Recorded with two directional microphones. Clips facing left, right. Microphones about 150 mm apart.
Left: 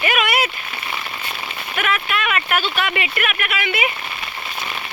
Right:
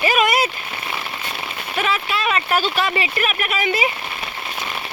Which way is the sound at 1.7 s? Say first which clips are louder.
Even; 30° right (ahead or behind).